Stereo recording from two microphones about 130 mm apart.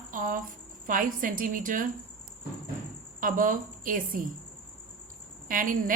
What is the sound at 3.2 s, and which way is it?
A woman's voice, 90° right.